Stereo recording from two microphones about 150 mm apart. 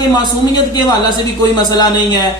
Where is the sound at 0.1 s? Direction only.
30° left (ahead or behind).